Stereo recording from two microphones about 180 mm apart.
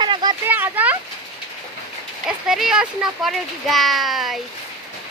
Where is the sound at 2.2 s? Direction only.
5° right (ahead or behind).